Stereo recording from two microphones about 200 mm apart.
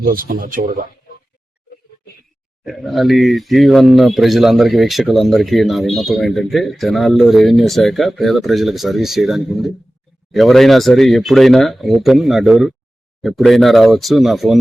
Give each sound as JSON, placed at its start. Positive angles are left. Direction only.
{"t": 0.0, "sound": "speech", "side_deg": -45}
{"t": 2.6, "sound": "speech", "side_deg": 0}